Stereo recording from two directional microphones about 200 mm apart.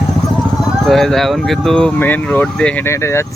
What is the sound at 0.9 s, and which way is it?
Speech, centre (ahead or behind).